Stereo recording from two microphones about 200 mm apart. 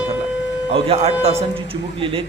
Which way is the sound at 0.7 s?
30° right (ahead or behind).